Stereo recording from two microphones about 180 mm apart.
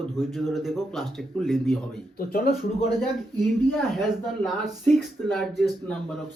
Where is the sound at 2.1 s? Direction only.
55° left (ahead or behind).